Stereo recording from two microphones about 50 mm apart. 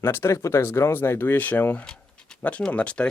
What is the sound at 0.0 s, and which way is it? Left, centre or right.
Speech, left.